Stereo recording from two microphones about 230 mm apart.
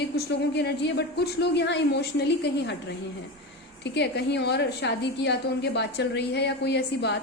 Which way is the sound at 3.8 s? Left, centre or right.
Left.